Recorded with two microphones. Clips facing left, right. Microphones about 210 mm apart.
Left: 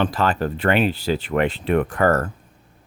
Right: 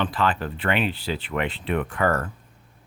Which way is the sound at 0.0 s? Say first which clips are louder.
Left 4 dB; 40° left (ahead or behind).